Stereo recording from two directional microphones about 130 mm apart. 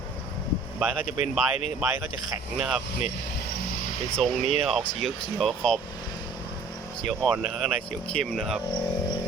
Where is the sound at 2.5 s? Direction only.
Centre (ahead or behind).